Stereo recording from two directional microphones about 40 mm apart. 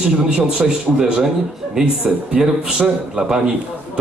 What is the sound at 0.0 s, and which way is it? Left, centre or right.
A man's voice, centre.